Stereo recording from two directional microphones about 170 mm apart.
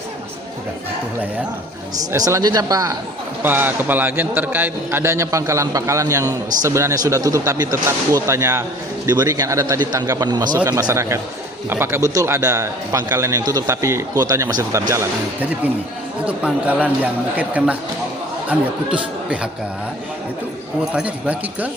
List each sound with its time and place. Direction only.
2.1 s a man's voice: 20° right (ahead or behind)
3.4 s a man's voice: 10° right (ahead or behind)
20.9 s a man's voice: 10° right (ahead or behind)